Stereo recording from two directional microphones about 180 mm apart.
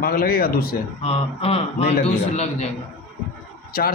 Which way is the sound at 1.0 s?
35° left (ahead or behind).